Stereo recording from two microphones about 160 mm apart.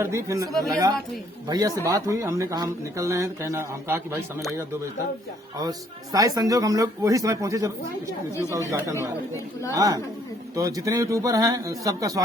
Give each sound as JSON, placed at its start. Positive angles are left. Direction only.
{"t": 0.0, "sound": "speech", "side_deg": -15}
{"t": 0.5, "sound": "speech", "side_deg": 0}
{"t": 1.5, "sound": "speech", "side_deg": -25}
{"t": 5.5, "sound": "speech", "side_deg": -25}